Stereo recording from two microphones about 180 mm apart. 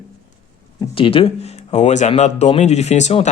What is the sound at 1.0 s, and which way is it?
Speech, 30° left (ahead or behind).